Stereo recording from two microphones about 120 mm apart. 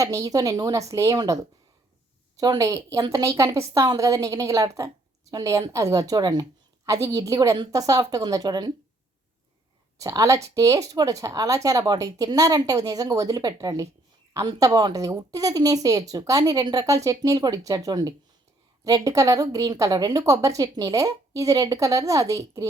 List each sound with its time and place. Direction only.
0.0 s a woman's voice: 30° right (ahead or behind)
10.0 s a woman's voice: 30° right (ahead or behind)